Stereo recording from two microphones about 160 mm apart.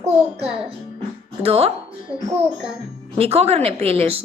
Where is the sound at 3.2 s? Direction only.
40° right (ahead or behind).